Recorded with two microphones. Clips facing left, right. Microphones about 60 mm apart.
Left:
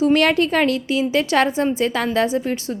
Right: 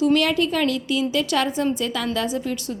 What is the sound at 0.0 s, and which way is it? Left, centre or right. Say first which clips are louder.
A woman's voice: left 3 dB; left.